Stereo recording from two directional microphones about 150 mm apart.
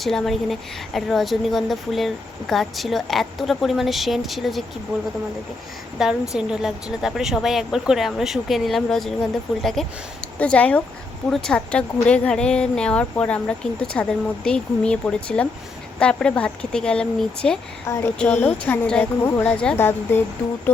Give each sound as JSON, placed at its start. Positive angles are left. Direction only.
{"t": 0.0, "sound": "a woman's voice", "side_deg": 0}
{"t": 6.0, "sound": "a woman's voice", "side_deg": 0}
{"t": 17.8, "sound": "speech", "side_deg": 20}